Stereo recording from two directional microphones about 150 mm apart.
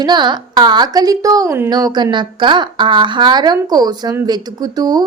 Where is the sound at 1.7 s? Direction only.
30° right (ahead or behind).